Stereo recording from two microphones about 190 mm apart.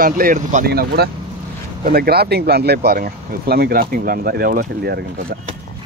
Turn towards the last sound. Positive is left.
turn(degrees=-55)  # may be behind; listen again after turning